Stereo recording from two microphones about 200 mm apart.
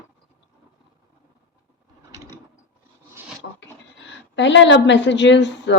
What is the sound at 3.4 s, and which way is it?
Goat, 65° left (ahead or behind).